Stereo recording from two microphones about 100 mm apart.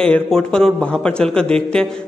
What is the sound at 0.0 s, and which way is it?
A man's voice, 10° left (ahead or behind).